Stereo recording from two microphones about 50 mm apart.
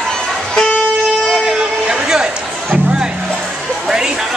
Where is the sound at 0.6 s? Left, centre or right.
Centre.